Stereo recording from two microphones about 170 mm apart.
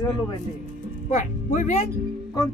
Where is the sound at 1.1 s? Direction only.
45° left (ahead or behind).